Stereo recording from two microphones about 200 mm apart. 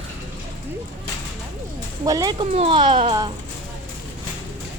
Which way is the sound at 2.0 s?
20° right (ahead or behind).